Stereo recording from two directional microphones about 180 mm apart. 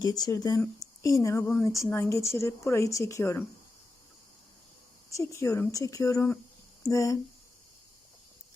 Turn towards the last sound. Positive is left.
turn(degrees=15)  # may be behind; listen again after turning